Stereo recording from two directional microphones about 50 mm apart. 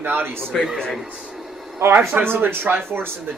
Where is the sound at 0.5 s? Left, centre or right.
Centre.